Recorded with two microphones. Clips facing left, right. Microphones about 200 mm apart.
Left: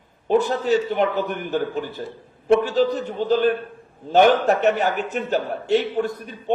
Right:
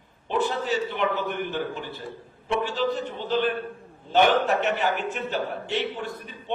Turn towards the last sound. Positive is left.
turn(degrees=40)  # may be behind; listen again after turning